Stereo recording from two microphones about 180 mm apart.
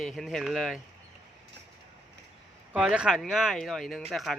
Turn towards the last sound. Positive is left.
turn(degrees=0)  # may be behind; listen again after turning